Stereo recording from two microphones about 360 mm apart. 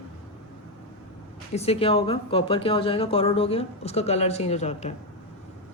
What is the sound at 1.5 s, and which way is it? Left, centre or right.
Speech, centre.